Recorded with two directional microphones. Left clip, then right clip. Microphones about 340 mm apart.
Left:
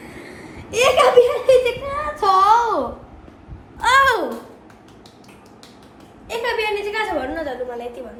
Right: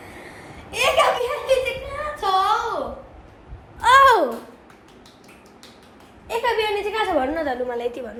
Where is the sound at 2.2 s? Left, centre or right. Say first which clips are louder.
Left 5 dB; centre.